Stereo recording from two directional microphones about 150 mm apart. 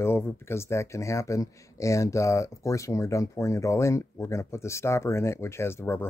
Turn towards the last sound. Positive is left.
turn(degrees=15)  # may be behind; listen again after turning